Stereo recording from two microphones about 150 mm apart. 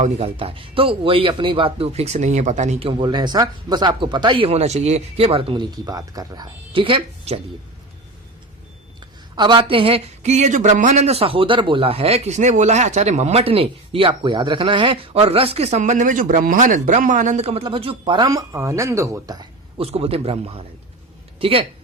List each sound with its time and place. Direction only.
0.0 s speech: 40° right (ahead or behind)
2.9 s speech: 30° right (ahead or behind)
9.3 s speech: 30° right (ahead or behind)
19.8 s speech: 40° right (ahead or behind)